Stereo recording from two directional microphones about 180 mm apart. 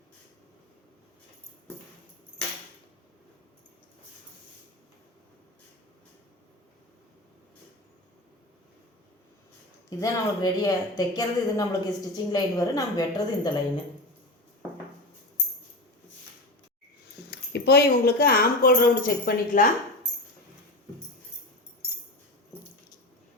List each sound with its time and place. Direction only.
10.0 s speech: 20° left (ahead or behind)
17.3 s speech: 65° left (ahead or behind)